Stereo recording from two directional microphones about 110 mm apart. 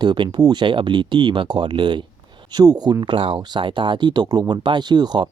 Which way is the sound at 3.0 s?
50° right (ahead or behind).